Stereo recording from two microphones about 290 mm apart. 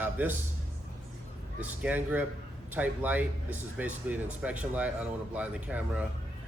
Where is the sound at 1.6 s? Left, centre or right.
Centre.